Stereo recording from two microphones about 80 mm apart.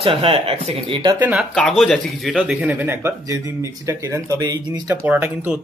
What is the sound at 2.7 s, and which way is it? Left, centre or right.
Speech, right.